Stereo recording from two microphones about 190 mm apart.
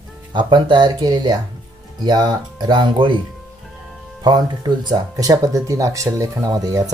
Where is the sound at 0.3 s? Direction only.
25° right (ahead or behind).